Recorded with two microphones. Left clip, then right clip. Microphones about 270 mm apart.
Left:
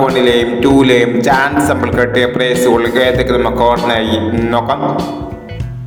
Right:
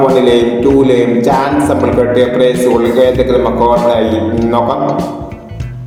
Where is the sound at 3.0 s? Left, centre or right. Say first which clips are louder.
Right 2 dB; left.